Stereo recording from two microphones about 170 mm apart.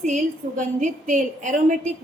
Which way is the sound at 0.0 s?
45° right (ahead or behind).